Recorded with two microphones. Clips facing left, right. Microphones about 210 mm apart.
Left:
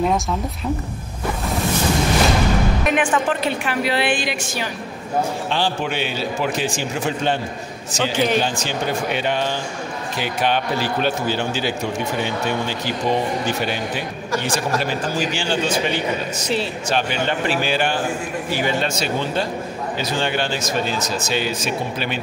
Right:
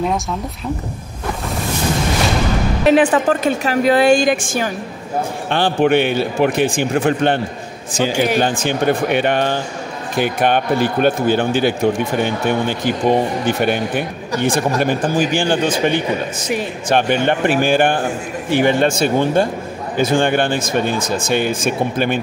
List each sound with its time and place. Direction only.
2.8 s a man's voice: 35° right (ahead or behind); by 7.3 s 60° right (ahead or behind)
8.0 s speech: 10° right (ahead or behind)
8.4 s a man's voice: 55° right (ahead or behind)